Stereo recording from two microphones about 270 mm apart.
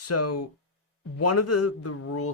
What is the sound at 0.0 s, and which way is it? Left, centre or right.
Speech, left.